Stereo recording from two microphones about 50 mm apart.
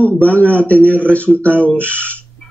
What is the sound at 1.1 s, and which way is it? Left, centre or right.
Speech, left.